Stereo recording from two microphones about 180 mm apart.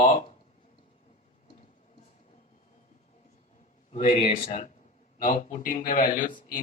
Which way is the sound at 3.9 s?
45° left (ahead or behind).